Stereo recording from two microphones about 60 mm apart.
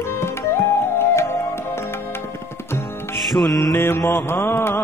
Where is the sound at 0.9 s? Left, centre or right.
Left.